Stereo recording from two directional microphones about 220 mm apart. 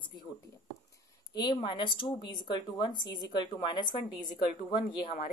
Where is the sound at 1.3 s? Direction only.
20° left (ahead or behind).